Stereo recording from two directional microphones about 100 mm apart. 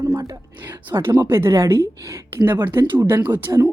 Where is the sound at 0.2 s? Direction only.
40° right (ahead or behind).